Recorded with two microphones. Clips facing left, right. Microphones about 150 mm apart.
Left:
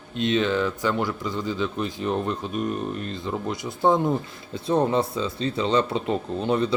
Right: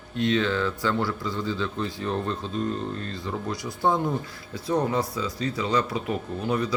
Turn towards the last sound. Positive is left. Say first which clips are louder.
# left 3 dB
turn(degrees=25)  # may be behind; listen again after turning